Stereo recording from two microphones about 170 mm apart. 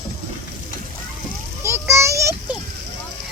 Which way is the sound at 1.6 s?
15° right (ahead or behind).